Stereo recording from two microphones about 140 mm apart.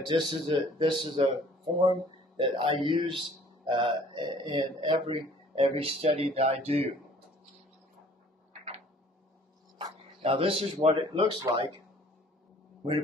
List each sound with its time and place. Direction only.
0.0 s speech: 35° right (ahead or behind)
9.8 s speech: 35° right (ahead or behind)
11.0 s speech: 35° right (ahead or behind)